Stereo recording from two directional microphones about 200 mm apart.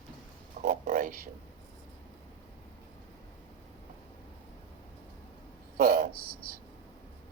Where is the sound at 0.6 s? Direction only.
45° right (ahead or behind).